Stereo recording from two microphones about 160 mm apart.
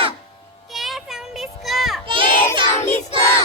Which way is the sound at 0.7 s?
Centre (ahead or behind).